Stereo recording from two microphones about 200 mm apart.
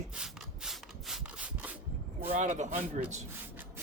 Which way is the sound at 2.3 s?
40° right (ahead or behind).